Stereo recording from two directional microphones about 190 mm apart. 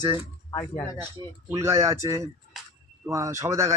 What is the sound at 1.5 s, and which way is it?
Speech, 15° right (ahead or behind).